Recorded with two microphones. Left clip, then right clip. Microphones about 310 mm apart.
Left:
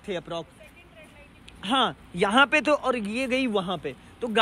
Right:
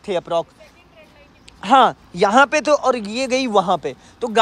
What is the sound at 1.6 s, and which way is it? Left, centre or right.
Speech, centre.